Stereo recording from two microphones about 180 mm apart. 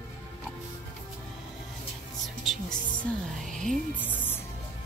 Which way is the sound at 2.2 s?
Centre (ahead or behind).